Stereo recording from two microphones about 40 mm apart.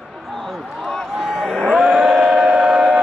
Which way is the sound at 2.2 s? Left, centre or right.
Centre.